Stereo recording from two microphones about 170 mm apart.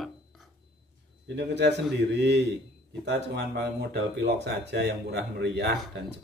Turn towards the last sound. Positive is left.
turn(degrees=-75)  # may be behind; listen again after turning